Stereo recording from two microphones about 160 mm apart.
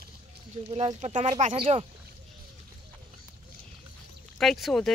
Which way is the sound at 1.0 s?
50° right (ahead or behind).